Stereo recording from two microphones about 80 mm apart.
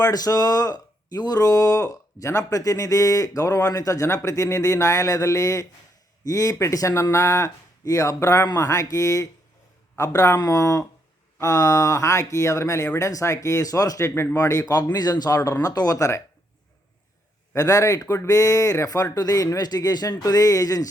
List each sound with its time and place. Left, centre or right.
0.0 s speech: left
17.5 s speech: left